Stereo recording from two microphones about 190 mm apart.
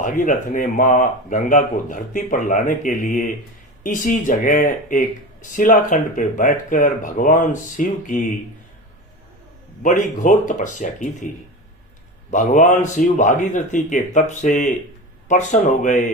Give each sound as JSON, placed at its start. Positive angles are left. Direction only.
{"t": 0.0, "sound": "speech", "side_deg": 45}
{"t": 9.8, "sound": "speech", "side_deg": 45}
{"t": 12.3, "sound": "a man's voice", "side_deg": 40}